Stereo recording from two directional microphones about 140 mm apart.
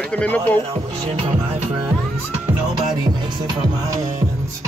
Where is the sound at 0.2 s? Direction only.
10° left (ahead or behind).